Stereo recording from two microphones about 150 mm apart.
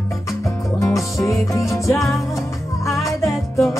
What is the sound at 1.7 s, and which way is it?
Music, 20° left (ahead or behind).